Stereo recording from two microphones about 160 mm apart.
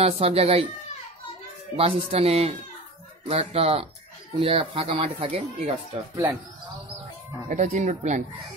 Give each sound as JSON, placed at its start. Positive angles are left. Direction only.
{"t": 0.0, "sound": "speech", "side_deg": -40}
{"t": 1.8, "sound": "speech", "side_deg": -35}
{"t": 7.4, "sound": "speech", "side_deg": -45}